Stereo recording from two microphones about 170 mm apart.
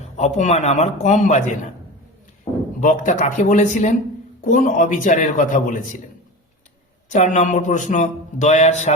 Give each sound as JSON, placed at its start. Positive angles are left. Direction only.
{"t": 0.2, "sound": "speech", "side_deg": 40}
{"t": 7.1, "sound": "speech", "side_deg": 45}